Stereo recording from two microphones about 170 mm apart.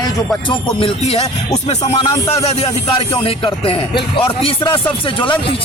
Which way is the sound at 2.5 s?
40° left (ahead or behind).